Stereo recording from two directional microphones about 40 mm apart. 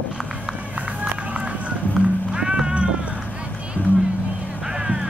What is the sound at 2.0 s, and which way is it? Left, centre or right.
Music, right.